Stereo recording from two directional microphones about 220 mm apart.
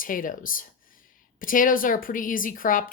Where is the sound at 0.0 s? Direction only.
40° left (ahead or behind).